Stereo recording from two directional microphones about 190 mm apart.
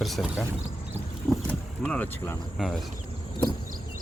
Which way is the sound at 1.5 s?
5° left (ahead or behind).